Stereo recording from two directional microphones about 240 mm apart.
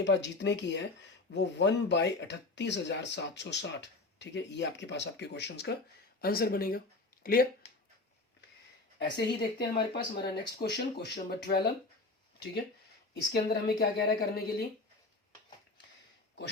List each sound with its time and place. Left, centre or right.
0.0 s speech: left
9.0 s speech: left
13.3 s a woman's voice: left